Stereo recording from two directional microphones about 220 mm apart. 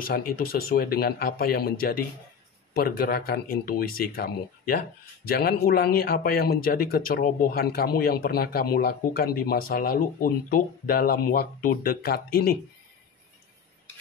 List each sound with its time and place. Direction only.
0.0 s speech: 40° left (ahead or behind)